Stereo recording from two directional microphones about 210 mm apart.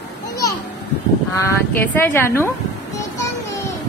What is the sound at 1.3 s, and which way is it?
Speech, 10° left (ahead or behind).